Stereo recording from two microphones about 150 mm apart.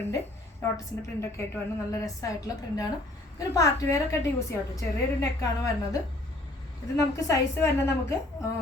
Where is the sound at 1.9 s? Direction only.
20° left (ahead or behind).